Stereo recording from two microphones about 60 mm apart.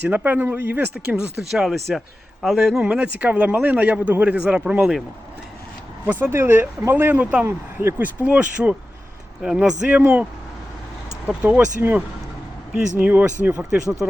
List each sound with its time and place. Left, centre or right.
0.0 s speech: right
0.9 s speech: centre
2.8 s speech: right
6.1 s speech: right
6.3 s speech: right
8.2 s speech: right
11.4 s speech: right
13.0 s speech: right
13.6 s speech: centre